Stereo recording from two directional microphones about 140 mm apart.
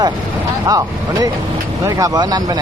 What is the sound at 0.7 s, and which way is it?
Speech, 25° right (ahead or behind).